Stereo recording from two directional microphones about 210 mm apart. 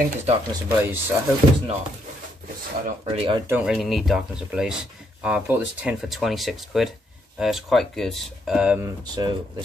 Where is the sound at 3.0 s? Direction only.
25° right (ahead or behind).